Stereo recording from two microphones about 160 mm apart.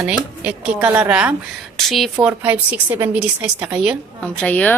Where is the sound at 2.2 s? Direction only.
10° right (ahead or behind).